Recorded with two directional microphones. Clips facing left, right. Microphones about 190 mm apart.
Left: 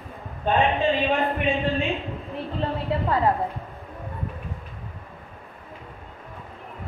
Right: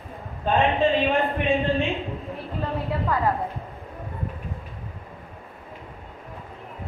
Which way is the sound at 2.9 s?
25° left (ahead or behind).